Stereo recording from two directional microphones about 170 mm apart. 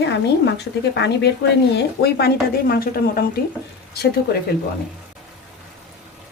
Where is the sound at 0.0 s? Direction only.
85° left.